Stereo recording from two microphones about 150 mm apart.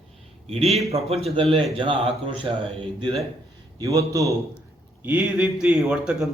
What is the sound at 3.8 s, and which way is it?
Speech, 20° right (ahead or behind).